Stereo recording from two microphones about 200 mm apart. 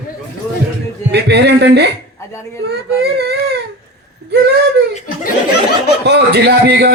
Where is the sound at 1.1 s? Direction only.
55° right (ahead or behind).